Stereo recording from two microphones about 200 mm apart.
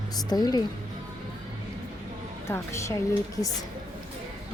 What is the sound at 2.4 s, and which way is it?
Speech, 15° left (ahead or behind).